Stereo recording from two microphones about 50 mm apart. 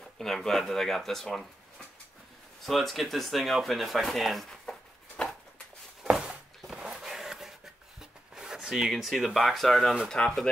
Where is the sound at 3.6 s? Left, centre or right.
Centre.